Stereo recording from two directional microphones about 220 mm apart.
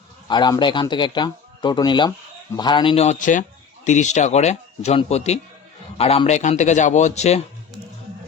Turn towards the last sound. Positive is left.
turn(degrees=30)  # may be behind; listen again after turning